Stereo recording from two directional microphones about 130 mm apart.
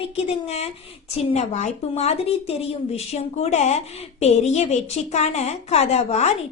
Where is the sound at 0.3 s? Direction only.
55° left (ahead or behind).